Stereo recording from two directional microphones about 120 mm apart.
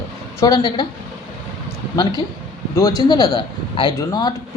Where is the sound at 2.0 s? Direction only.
40° left (ahead or behind).